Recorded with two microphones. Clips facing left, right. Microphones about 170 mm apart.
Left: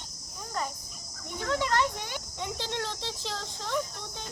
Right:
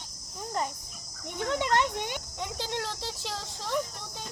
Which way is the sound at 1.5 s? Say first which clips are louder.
Right 1 dB; 20° right (ahead or behind).